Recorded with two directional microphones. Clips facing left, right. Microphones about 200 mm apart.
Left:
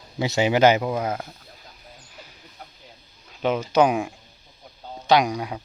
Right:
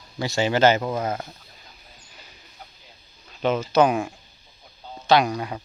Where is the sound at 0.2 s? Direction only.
20° left (ahead or behind).